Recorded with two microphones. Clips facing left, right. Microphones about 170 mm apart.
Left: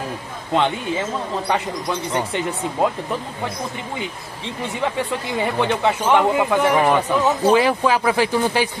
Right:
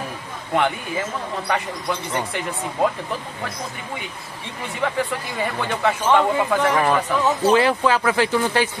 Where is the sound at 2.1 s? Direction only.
20° left (ahead or behind).